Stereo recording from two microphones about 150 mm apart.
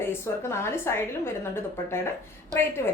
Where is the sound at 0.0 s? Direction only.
15° left (ahead or behind).